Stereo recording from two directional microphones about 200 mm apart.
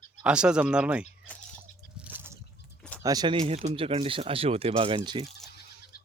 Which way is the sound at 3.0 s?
20° right (ahead or behind).